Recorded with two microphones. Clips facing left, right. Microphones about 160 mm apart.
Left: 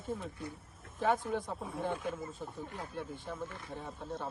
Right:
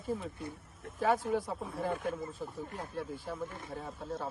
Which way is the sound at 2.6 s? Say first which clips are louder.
Right 1 dB; 45° right (ahead or behind).